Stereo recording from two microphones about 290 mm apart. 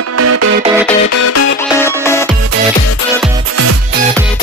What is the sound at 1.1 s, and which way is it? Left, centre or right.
Music, left.